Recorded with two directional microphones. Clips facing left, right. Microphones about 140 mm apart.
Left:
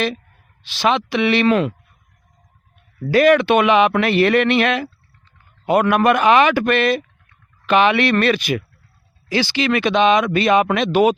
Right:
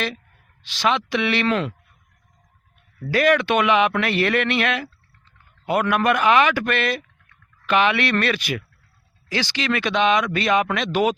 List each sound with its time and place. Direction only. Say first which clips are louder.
0.9 s a man's voice: left 4 dB; 20° left (ahead or behind)
3.1 s a man's voice: left 5 dB; 25° left (ahead or behind)